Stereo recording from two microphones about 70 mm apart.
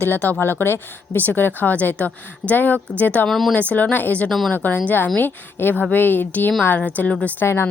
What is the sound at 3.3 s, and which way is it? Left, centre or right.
Speech, centre.